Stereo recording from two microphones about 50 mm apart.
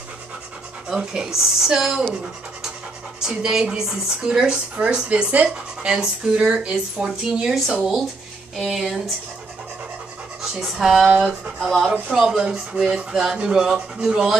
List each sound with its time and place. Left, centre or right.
0.8 s speech: centre
3.2 s speech: centre
8.5 s speech: centre
10.4 s speech: centre
12.1 s speech: centre